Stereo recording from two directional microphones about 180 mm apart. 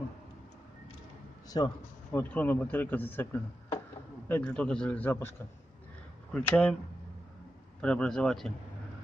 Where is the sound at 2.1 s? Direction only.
10° left (ahead or behind).